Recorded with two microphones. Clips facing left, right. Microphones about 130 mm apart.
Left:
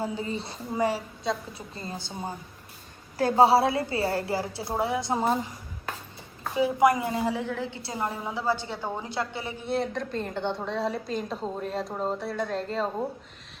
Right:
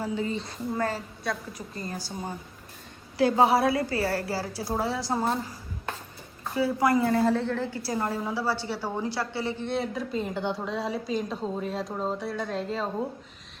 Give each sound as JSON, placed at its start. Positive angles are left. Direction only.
{"t": 0.7, "sound": "a woman's voice", "side_deg": 10}
{"t": 1.3, "sound": "a woman's voice", "side_deg": 25}
{"t": 3.2, "sound": "a woman's voice", "side_deg": 45}
{"t": 3.4, "sound": "a woman's voice", "side_deg": 30}
{"t": 6.5, "sound": "a woman's voice", "side_deg": 20}
{"t": 9.6, "sound": "a woman's voice", "side_deg": 0}